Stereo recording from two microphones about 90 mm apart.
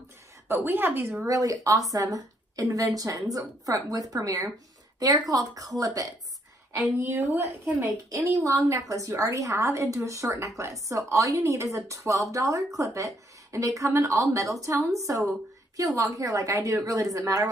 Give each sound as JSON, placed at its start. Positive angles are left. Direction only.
{"t": 0.5, "sound": "a woman's voice", "side_deg": -25}
{"t": 1.2, "sound": "a woman's voice", "side_deg": -40}
{"t": 7.0, "sound": "a woman's voice", "side_deg": -30}